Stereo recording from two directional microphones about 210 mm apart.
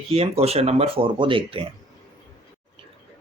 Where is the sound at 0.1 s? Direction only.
30° right (ahead or behind).